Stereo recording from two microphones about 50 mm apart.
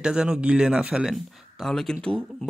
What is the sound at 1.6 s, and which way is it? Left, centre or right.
Speech, centre.